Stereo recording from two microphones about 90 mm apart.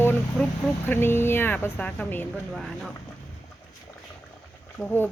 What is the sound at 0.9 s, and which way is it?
Speech, 25° left (ahead or behind).